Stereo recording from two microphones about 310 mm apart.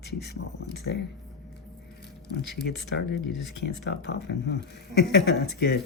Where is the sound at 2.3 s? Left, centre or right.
Left.